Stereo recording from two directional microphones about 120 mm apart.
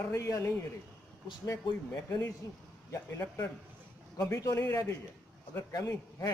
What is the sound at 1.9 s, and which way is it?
A man's voice, 15° left (ahead or behind).